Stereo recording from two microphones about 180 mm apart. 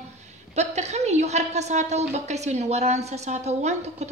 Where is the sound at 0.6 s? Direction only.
40° right (ahead or behind).